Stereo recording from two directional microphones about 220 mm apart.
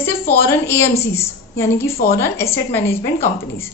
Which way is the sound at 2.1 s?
10° left (ahead or behind).